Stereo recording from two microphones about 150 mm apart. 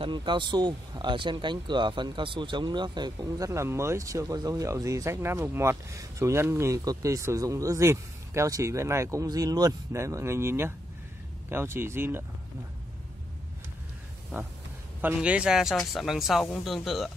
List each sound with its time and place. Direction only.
0.0 s speech: 30° right (ahead or behind); by 12.3 s 15° right (ahead or behind)
15.0 s speech: 10° right (ahead or behind)